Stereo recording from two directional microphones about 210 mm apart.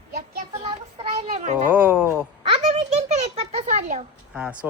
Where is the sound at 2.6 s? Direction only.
30° right (ahead or behind).